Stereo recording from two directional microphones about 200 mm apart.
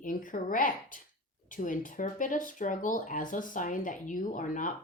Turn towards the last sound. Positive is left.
turn(degrees=40)  # may be behind; listen again after turning